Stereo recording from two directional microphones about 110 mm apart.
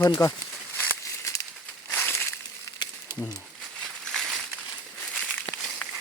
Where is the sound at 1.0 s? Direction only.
30° left (ahead or behind).